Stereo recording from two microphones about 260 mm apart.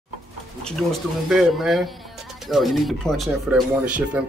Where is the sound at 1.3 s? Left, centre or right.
Centre.